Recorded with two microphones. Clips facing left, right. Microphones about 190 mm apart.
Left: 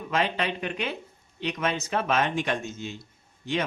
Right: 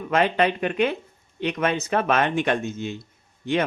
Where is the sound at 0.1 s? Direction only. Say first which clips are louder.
Right 7 dB; 55° right (ahead or behind).